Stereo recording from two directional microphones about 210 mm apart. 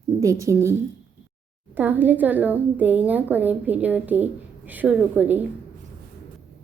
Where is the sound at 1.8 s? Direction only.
10° right (ahead or behind).